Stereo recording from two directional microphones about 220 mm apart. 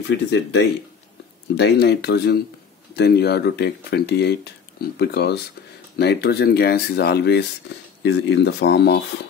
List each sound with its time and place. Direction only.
0.1 s speech: 50° left (ahead or behind)